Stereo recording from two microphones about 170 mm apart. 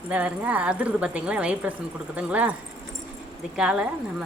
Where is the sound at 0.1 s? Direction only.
5° right (ahead or behind).